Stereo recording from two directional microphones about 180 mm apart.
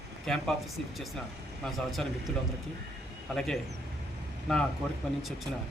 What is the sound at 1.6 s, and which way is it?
Speech, centre (ahead or behind).